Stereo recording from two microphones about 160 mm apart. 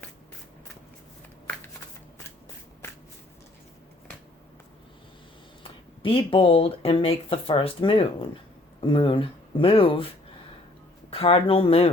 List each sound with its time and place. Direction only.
5.6 s speech: 35° left (ahead or behind)
11.1 s speech: 35° left (ahead or behind)